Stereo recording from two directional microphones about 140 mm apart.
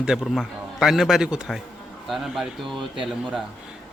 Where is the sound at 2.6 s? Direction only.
35° right (ahead or behind).